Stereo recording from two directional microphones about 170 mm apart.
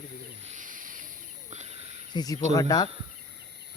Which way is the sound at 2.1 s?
25° left (ahead or behind).